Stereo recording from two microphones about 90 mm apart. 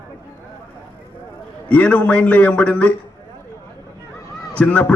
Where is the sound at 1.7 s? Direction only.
15° left (ahead or behind).